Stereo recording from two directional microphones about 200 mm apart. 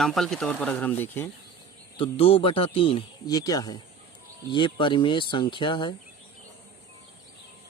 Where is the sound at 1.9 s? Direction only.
25° left (ahead or behind).